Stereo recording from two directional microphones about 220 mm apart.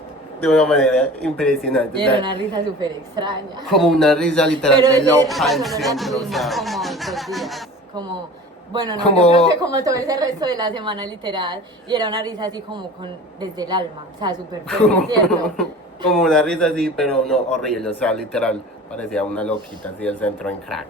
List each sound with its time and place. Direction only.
0.4 s a man's voice: 5° left (ahead or behind)
2.2 s a woman's voice: 20° right (ahead or behind)
3.7 s a man's voice: centre (ahead or behind)
4.8 s a man's voice: 15° right (ahead or behind)
5.3 s a man's voice: centre (ahead or behind)
8.7 s a woman's voice: 20° right (ahead or behind)
14.7 s a man's voice: 5° left (ahead or behind)